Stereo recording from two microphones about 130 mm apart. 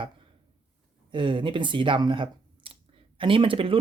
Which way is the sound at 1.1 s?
40° right (ahead or behind).